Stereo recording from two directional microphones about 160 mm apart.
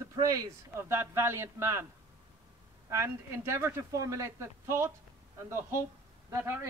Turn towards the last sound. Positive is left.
turn(degrees=-15)  # may be behind; listen again after turning